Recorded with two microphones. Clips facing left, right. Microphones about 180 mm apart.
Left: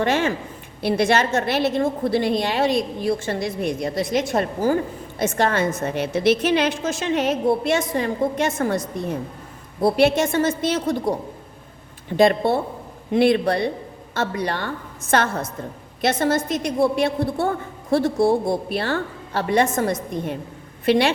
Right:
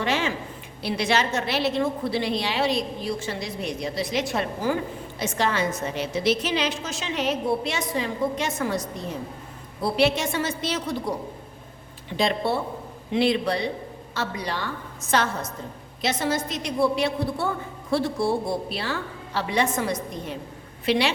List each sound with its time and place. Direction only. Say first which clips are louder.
0.0 s a woman's voice: left 5 dB; 50° left (ahead or behind)
12.1 s a woman's voice: left 7 dB; 50° left (ahead or behind)